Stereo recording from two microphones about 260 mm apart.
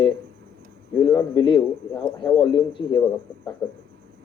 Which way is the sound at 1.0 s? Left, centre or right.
Centre.